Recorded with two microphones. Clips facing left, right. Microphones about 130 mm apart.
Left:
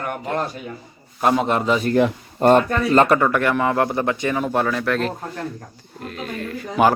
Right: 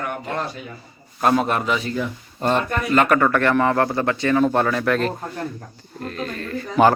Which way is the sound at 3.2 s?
10° left (ahead or behind).